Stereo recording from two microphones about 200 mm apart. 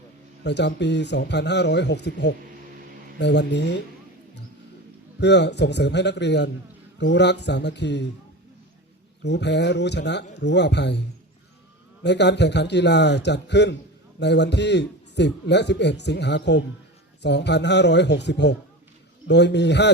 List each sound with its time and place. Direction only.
0.4 s a man's voice: 60° left (ahead or behind)
5.2 s a man's voice: 60° left (ahead or behind)
9.2 s a man's voice: 60° left (ahead or behind)
12.0 s a man's voice: 60° left (ahead or behind)